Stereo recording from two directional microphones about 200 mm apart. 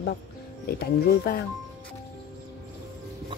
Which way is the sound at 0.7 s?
50° left (ahead or behind).